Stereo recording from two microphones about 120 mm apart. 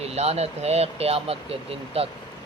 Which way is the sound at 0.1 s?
60° right (ahead or behind).